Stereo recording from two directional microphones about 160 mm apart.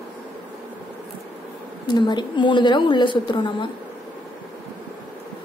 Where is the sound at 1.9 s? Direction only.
25° left (ahead or behind).